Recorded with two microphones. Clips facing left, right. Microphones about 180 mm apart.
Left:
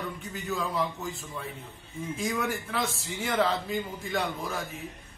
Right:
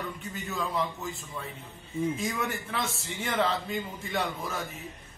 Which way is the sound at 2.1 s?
Centre (ahead or behind).